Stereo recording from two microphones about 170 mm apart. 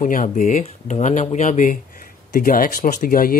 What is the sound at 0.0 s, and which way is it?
Speech, 50° left (ahead or behind).